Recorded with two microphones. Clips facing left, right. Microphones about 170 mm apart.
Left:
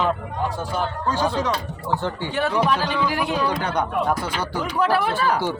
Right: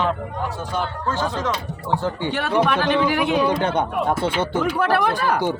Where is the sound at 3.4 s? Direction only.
25° right (ahead or behind).